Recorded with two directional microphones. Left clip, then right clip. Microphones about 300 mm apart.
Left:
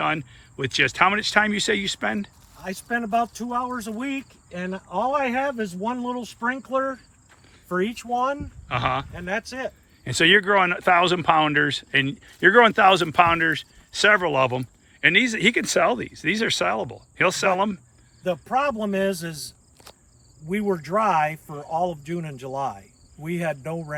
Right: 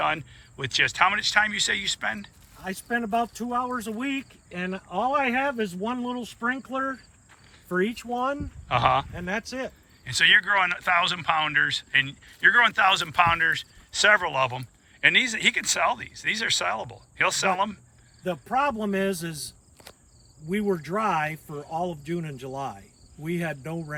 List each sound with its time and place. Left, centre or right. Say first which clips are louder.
0.0 s speech: left 1 dB; centre; by 8.4 s left
8.6 s speech: right 3 dB; centre
9.1 s speech: left 2 dB; left
10.0 s speech: left 1 dB; centre